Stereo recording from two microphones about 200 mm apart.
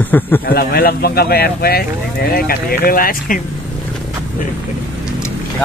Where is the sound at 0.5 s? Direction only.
50° left (ahead or behind).